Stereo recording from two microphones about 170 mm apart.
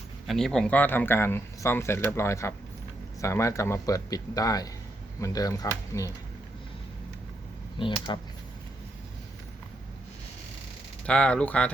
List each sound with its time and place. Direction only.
0.3 s speech: 5° left (ahead or behind)
7.8 s speech: 30° left (ahead or behind)
11.0 s speech: 5° left (ahead or behind)